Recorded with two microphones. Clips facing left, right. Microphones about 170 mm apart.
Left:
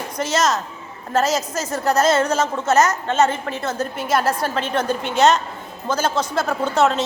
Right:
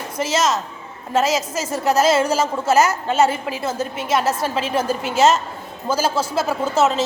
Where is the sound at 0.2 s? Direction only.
5° right (ahead or behind).